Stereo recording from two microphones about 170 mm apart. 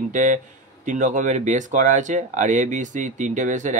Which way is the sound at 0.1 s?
45° right (ahead or behind).